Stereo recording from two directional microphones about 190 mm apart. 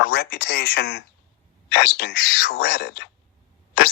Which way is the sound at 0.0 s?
55° left (ahead or behind).